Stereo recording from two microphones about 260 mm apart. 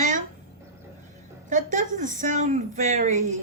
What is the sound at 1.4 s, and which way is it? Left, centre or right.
A woman's voice, right.